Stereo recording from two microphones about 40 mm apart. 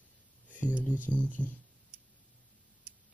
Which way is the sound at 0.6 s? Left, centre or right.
Right.